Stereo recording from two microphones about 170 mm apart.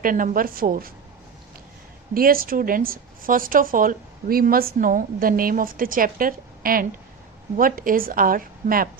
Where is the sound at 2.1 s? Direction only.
60° right (ahead or behind).